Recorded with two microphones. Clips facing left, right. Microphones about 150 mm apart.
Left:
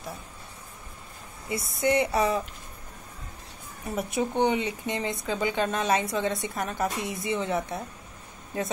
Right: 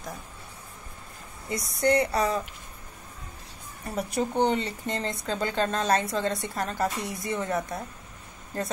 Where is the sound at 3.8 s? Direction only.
Centre (ahead or behind).